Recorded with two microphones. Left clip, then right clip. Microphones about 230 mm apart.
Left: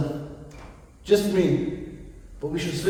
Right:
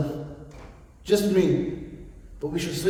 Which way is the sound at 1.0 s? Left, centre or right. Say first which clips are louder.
Left 1 dB; right.